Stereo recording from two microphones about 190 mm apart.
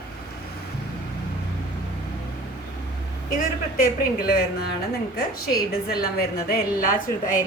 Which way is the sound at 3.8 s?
50° left (ahead or behind).